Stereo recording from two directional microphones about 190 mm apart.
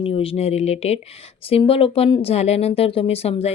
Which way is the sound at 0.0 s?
30° left (ahead or behind).